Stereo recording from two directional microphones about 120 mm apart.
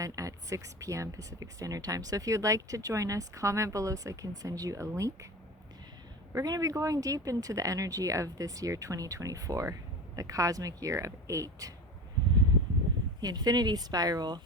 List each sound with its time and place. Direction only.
0.0 s speech: 25° right (ahead or behind)
6.3 s speech: 30° right (ahead or behind)
13.2 s speech: 35° right (ahead or behind)